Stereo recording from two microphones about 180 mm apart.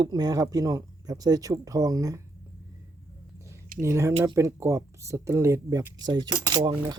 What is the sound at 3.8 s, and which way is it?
A man's voice, 15° right (ahead or behind).